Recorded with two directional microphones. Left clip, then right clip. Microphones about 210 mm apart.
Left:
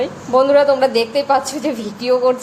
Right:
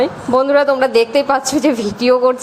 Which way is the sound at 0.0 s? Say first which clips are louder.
Right 1 dB; 20° right (ahead or behind).